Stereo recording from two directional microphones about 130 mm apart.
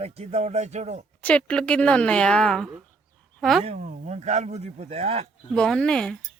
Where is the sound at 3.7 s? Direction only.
75° right (ahead or behind); by 5.3 s 55° right (ahead or behind).